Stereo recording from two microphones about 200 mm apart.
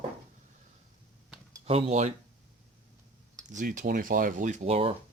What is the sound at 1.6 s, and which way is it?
Speech, 30° right (ahead or behind).